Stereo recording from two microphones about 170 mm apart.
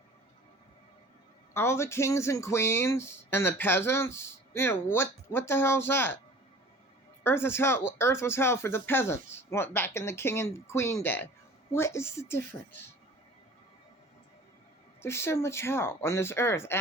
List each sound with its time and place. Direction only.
1.5 s speech: 15° left (ahead or behind)
7.3 s speech: 15° left (ahead or behind)
15.0 s speech: 15° left (ahead or behind)